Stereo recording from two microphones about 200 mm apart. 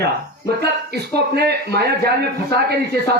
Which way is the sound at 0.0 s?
55° right (ahead or behind).